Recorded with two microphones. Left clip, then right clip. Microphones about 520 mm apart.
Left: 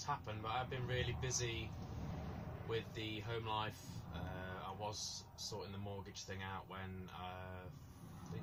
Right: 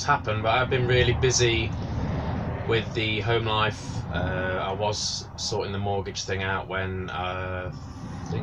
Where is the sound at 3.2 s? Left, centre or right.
Left.